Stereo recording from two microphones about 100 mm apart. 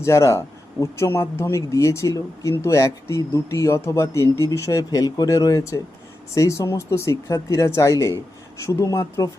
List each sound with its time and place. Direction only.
0.0 s speech: 30° left (ahead or behind)